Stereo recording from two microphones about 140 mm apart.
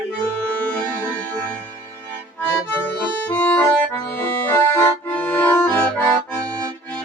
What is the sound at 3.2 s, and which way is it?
Accordion, 10° left (ahead or behind).